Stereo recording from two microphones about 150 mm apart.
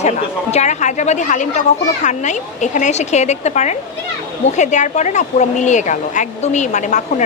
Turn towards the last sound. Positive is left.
turn(degrees=55)  # may be behind; listen again after turning